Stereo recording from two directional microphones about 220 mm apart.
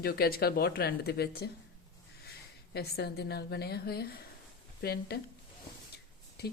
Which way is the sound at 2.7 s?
45° left (ahead or behind).